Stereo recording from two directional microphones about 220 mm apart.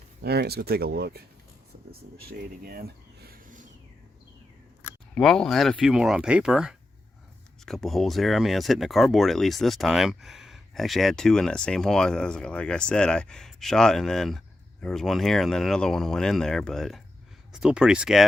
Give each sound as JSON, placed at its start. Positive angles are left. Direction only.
{"t": 0.2, "sound": "speech", "side_deg": -45}
{"t": 3.2, "sound": "a sound", "side_deg": -35}
{"t": 5.1, "sound": "speech", "side_deg": 0}